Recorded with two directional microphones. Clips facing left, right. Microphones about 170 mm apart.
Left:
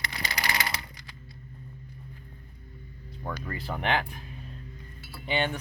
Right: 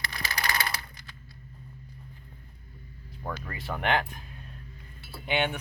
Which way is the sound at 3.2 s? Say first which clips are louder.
Left 1 dB; centre (ahead or behind).